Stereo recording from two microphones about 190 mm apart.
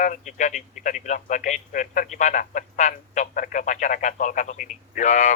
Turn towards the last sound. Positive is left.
turn(degrees=40)  # may be behind; listen again after turning